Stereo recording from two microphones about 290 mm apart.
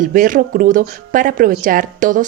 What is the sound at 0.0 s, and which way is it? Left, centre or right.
Speech, right.